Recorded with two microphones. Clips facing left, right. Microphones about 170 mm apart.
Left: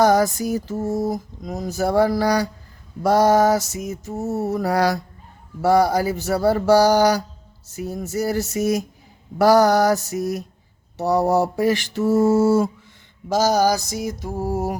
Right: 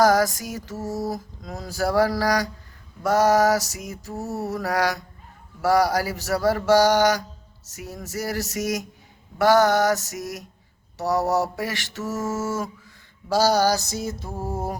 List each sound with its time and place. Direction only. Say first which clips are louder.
0.0 s mantra: left 2 dB; 25° left (ahead or behind)
13.2 s mantra: left 2 dB; 15° left (ahead or behind)